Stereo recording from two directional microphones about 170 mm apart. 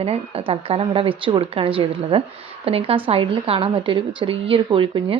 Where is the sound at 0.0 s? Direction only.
35° right (ahead or behind).